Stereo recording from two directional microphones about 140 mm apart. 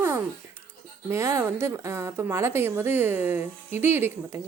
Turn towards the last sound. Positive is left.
turn(degrees=-15)  # may be behind; listen again after turning